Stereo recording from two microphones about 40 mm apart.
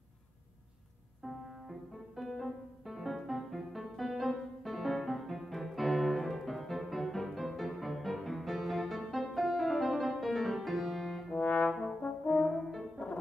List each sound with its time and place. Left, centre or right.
1.2 s music: centre
11.4 s brass instrument: left
12.3 s french horn: centre